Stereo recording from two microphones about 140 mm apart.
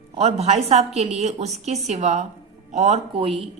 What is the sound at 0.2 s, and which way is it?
A woman's voice, 50° right (ahead or behind).